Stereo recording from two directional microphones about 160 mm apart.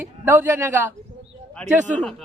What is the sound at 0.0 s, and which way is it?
Speech, 15° right (ahead or behind).